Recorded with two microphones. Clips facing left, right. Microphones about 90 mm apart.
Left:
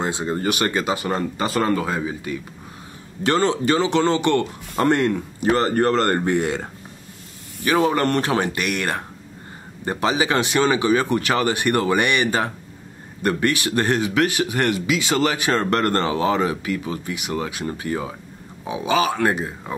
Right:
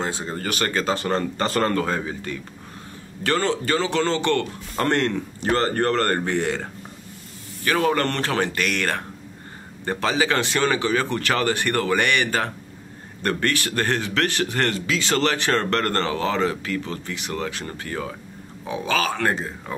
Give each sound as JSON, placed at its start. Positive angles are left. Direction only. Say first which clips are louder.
{"t": 0.0, "sound": "speech", "louder": "left 5 dB", "side_deg": 15}
{"t": 3.3, "sound": "speech", "louder": "left 3 dB", "side_deg": 20}